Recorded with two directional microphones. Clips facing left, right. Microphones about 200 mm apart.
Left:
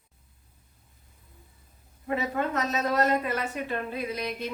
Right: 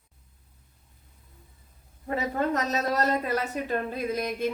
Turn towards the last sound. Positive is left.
turn(degrees=-45)  # may be behind; listen again after turning